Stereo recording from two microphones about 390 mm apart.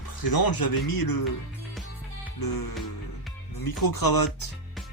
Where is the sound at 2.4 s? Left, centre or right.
Left.